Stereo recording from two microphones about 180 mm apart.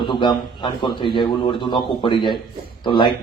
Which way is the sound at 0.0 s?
25° left (ahead or behind).